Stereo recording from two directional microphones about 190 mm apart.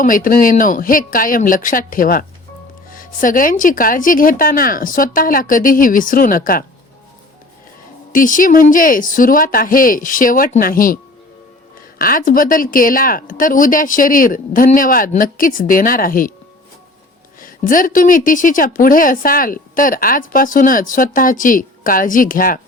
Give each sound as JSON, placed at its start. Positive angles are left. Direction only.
{"t": 0.0, "sound": "a woman's voice", "side_deg": 45}
{"t": 8.1, "sound": "a woman's voice", "side_deg": 45}
{"t": 17.4, "sound": "a woman's voice", "side_deg": 45}